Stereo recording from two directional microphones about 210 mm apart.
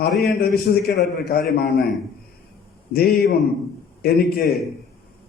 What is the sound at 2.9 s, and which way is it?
A man's voice, 45° left (ahead or behind).